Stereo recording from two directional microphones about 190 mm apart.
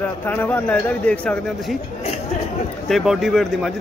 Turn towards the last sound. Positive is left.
turn(degrees=0)  # may be behind; listen again after turning